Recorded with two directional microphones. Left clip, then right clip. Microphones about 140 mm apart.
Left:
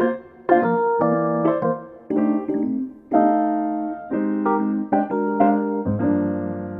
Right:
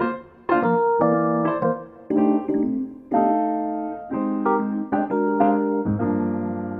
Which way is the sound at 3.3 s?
45° left (ahead or behind).